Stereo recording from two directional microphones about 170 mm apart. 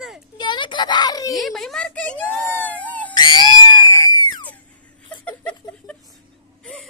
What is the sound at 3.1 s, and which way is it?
Screaming, 25° left (ahead or behind).